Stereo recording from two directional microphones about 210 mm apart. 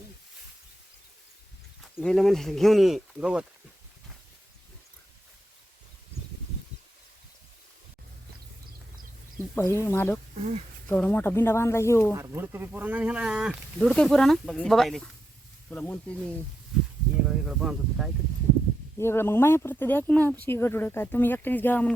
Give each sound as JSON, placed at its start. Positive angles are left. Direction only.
{"t": 1.8, "sound": "speech", "side_deg": 0}
{"t": 9.6, "sound": "speech", "side_deg": 10}
{"t": 12.1, "sound": "speech", "side_deg": -15}
{"t": 18.9, "sound": "speech", "side_deg": 10}